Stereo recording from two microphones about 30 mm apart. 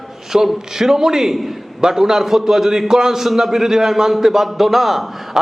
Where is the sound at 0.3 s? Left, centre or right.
Centre.